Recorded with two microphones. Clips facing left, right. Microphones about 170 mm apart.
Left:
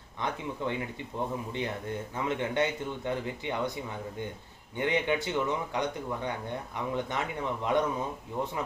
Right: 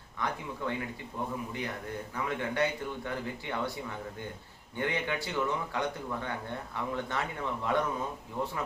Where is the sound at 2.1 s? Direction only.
20° left (ahead or behind).